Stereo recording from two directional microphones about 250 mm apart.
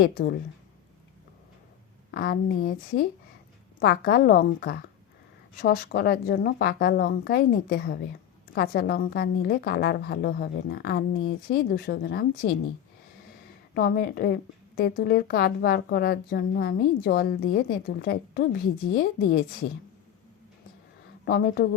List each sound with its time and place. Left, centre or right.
0.0 s a woman's voice: left
2.0 s a woman's voice: left
13.7 s a woman's voice: left
21.2 s a woman's voice: left